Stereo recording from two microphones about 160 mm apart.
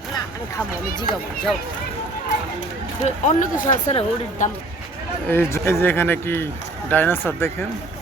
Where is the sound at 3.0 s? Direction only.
55° left (ahead or behind).